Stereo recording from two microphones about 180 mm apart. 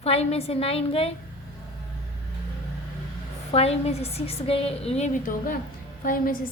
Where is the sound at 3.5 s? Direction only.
35° left (ahead or behind).